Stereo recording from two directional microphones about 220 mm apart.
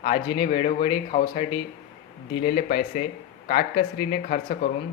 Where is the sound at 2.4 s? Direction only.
40° left (ahead or behind).